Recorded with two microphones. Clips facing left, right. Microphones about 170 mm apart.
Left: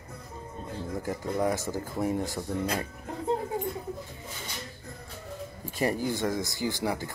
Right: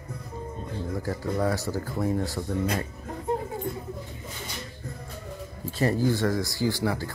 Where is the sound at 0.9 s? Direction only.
20° left (ahead or behind).